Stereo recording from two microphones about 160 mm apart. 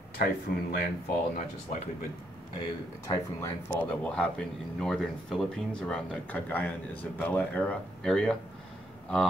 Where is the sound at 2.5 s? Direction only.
20° left (ahead or behind).